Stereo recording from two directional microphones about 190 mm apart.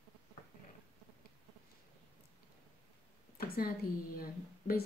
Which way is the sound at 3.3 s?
50° left (ahead or behind).